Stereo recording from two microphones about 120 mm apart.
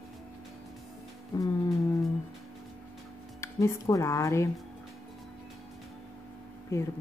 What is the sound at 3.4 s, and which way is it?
Speech, 25° left (ahead or behind).